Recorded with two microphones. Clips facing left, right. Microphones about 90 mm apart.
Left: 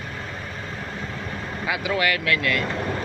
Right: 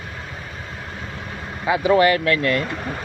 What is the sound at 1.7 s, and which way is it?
Speech, 35° right (ahead or behind).